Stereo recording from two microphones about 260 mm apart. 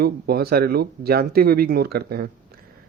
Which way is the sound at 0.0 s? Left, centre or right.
Right.